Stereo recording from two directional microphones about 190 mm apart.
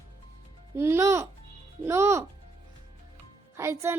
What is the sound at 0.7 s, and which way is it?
Speech, 15° right (ahead or behind).